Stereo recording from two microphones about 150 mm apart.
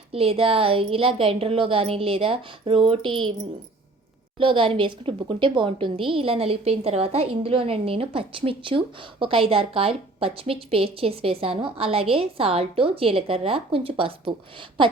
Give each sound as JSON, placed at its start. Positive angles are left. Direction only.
{"t": 0.1, "sound": "a woman's voice", "side_deg": -40}